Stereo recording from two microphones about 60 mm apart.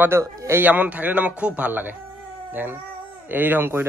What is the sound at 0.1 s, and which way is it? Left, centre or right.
Speech, right.